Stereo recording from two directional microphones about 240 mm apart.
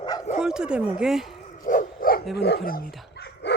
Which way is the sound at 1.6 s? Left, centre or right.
Left.